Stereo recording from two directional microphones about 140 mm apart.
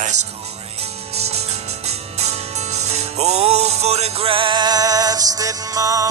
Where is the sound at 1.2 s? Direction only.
50° right (ahead or behind).